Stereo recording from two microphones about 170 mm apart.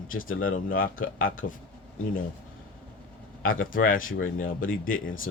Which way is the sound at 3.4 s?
55° left (ahead or behind).